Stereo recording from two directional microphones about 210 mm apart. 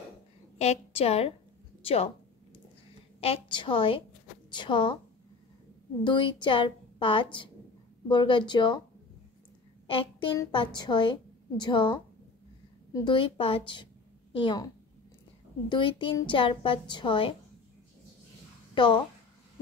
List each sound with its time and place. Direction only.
0.6 s a woman's voice: 30° left (ahead or behind)
3.2 s a woman's voice: 25° left (ahead or behind)
6.0 s a woman's voice: 20° left (ahead or behind)
9.8 s a woman's voice: 25° left (ahead or behind)
15.7 s a woman's voice: 25° left (ahead or behind)
18.8 s a woman's voice: 20° left (ahead or behind)